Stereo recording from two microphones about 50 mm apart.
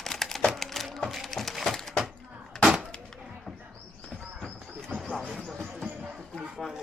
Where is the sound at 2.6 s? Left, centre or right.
Centre.